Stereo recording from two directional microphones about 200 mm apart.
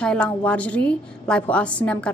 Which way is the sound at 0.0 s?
5° left (ahead or behind).